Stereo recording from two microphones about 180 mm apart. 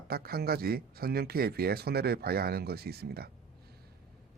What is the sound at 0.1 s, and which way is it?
Speech, 60° right (ahead or behind).